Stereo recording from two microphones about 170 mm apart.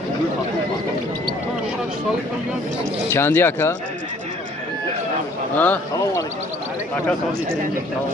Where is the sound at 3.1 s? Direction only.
15° left (ahead or behind).